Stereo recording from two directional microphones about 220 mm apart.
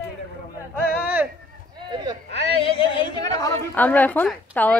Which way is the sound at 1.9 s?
15° right (ahead or behind).